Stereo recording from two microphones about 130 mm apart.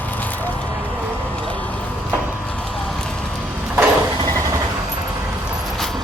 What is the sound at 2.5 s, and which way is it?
Clip-clop, 5° left (ahead or behind).